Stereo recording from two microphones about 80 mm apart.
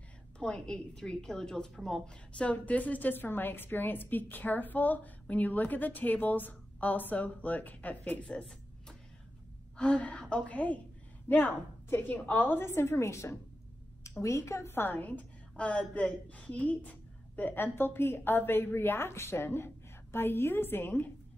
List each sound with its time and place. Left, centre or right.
0.4 s a woman's voice: centre; by 21.1 s left